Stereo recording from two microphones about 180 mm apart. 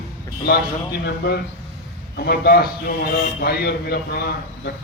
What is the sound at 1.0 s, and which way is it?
A man's voice, 65° left (ahead or behind).